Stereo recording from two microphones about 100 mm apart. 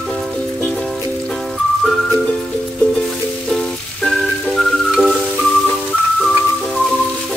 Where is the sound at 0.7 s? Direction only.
5° left (ahead or behind).